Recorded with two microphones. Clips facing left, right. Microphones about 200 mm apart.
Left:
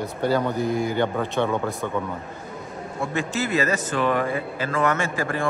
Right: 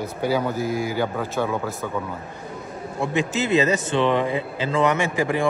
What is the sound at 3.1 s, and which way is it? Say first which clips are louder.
Speech: right 4 dB; 20° right (ahead or behind).